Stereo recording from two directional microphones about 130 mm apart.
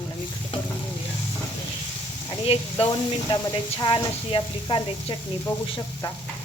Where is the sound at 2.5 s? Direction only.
45° left (ahead or behind).